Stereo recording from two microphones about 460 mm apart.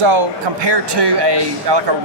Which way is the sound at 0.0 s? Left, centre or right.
Right.